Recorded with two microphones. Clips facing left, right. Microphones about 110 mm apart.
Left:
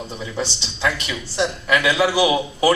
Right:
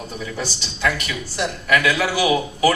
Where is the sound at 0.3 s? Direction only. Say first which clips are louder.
Left 2 dB; 25° left (ahead or behind).